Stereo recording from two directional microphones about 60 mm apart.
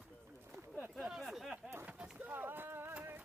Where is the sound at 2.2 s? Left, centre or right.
Right.